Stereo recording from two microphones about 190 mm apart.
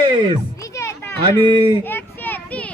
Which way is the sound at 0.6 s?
15° left (ahead or behind).